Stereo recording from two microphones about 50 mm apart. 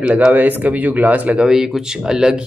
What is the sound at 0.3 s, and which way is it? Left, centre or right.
Speech, right.